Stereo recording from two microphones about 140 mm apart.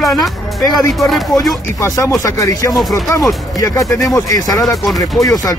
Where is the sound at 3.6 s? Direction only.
25° left (ahead or behind).